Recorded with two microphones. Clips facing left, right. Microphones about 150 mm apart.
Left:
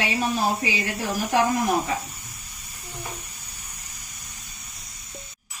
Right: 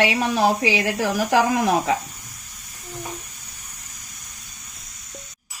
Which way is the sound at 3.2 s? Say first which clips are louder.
Even; 35° left (ahead or behind).